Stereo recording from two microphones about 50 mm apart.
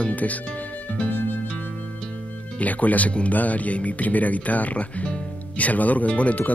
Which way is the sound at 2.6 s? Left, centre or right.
Left.